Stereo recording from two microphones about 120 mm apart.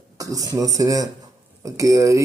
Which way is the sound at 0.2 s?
30° right (ahead or behind).